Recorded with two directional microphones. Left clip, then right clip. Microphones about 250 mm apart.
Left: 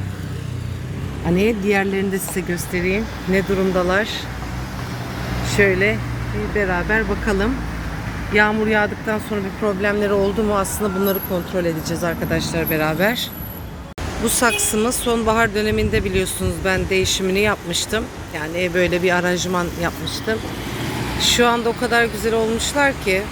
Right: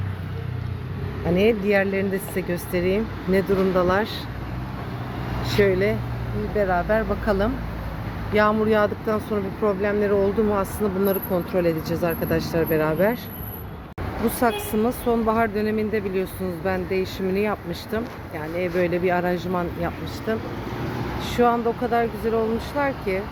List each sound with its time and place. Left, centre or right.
1.4 s speech: centre
5.5 s speech: centre
14.3 s speech: centre
21.3 s speech: centre